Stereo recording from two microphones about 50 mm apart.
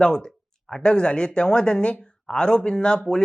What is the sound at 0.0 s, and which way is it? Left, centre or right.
Speech, centre.